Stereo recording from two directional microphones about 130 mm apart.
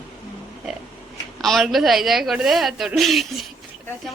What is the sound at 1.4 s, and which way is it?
Speech, centre (ahead or behind).